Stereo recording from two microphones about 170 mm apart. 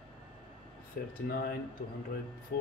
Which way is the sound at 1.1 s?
60° left (ahead or behind).